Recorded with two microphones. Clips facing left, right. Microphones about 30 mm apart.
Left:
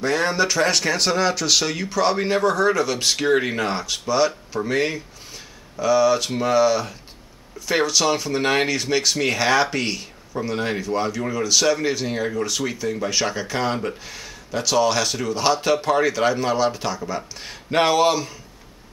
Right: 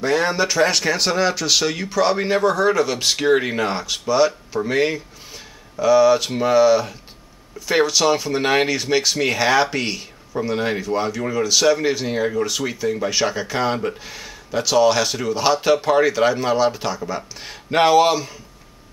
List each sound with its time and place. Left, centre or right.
0.0 s speech: centre